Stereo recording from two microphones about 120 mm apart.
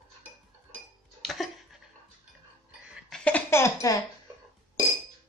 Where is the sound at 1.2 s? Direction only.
Centre (ahead or behind).